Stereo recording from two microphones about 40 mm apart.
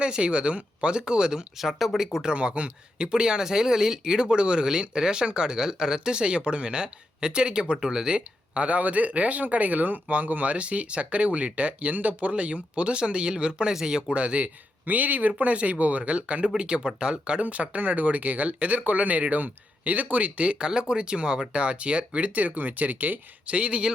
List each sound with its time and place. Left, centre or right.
0.0 s speech: right
1.5 s speech: centre
2.3 s speech: right
17.4 s speech: right